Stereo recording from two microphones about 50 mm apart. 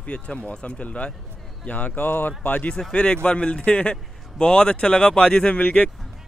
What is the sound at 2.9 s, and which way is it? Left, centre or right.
Speech, left.